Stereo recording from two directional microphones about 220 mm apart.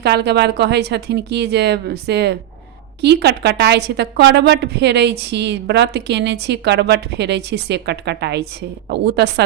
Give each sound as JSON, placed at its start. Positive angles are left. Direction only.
{"t": 0.0, "sound": "a woman's voice", "side_deg": -50}